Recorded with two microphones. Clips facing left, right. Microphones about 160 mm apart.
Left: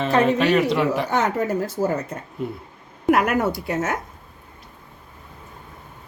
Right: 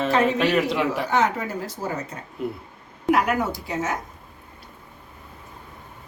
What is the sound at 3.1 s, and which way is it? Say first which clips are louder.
Speech: left 2 dB; 55° left (ahead or behind).